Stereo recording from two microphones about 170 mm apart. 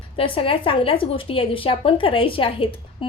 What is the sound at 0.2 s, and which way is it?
Speech, 30° left (ahead or behind).